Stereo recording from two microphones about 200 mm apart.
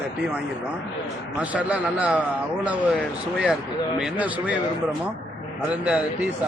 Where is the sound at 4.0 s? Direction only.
5° right (ahead or behind).